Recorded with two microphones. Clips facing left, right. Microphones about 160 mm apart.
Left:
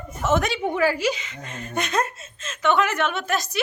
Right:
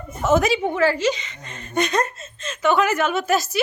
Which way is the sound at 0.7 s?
10° left (ahead or behind).